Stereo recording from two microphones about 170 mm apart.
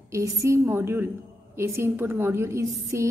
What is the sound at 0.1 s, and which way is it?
A woman's voice, 20° right (ahead or behind).